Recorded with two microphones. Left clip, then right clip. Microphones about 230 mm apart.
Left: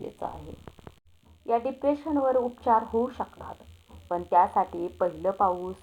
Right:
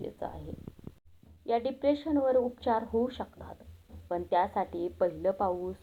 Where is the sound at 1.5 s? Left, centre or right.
Left.